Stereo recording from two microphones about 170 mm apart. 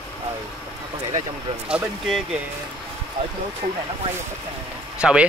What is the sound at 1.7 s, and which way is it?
Speech, 5° right (ahead or behind).